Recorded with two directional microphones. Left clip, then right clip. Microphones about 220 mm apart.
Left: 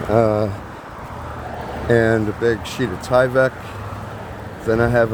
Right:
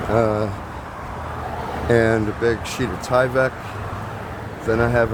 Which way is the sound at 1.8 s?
15° left (ahead or behind).